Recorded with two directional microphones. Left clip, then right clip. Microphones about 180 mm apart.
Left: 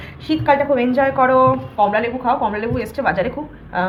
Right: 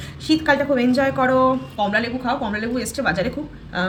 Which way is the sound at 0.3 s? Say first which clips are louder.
Left 2 dB; 25° right (ahead or behind).